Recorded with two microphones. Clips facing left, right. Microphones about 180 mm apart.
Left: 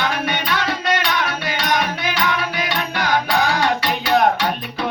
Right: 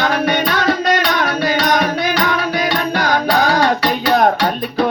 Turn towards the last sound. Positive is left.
turn(degrees=-40)  # may be behind; listen again after turning